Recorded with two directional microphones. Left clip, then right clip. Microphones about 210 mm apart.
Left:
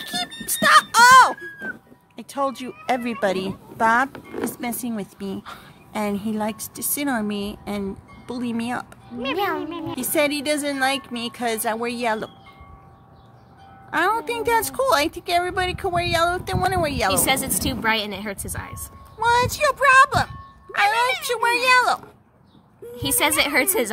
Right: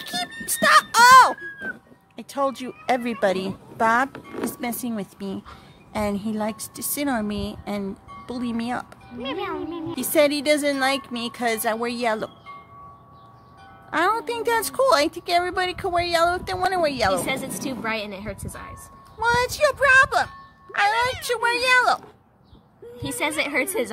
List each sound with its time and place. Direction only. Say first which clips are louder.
0.0 s music: left 1 dB; 10° right (ahead or behind)
2.1 s a woman's voice: even; 5° right (ahead or behind)
9.2 s a child's voice: left 5 dB; 55° left (ahead or behind)
9.9 s a woman's voice: right 2 dB; 10° right (ahead or behind)
13.8 s a woman's voice: left 1 dB; 10° right (ahead or behind)
17.3 s a woman's voice: left 5 dB; 40° left (ahead or behind)
19.1 s speech: left 2 dB; 5° right (ahead or behind)
23.0 s a woman's voice: left 5 dB; 40° left (ahead or behind)